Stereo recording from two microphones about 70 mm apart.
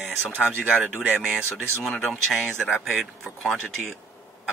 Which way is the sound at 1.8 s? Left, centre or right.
Centre.